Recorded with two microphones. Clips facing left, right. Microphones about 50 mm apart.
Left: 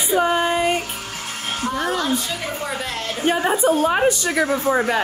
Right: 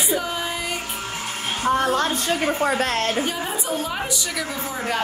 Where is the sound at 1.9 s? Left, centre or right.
Right.